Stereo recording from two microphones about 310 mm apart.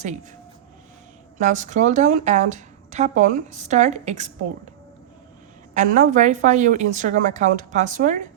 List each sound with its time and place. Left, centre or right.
1.4 s a woman's voice: right
5.7 s a woman's voice: right